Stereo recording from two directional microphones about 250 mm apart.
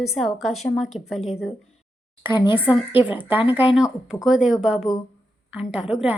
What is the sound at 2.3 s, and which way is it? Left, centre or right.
Speech, centre.